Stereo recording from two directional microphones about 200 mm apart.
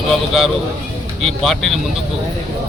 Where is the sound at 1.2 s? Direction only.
Centre (ahead or behind).